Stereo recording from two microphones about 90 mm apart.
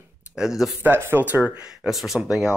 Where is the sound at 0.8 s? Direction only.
25° right (ahead or behind).